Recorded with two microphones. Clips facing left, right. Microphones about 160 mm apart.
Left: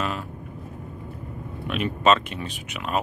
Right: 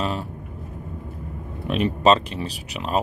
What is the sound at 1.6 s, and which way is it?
Speech, 35° right (ahead or behind).